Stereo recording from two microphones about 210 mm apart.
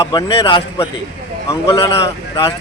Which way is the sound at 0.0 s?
20° left (ahead or behind).